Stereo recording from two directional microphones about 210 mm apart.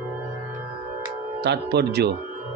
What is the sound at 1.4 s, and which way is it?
Mantra, 50° right (ahead or behind).